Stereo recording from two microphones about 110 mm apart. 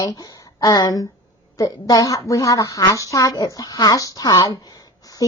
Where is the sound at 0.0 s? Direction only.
35° left (ahead or behind).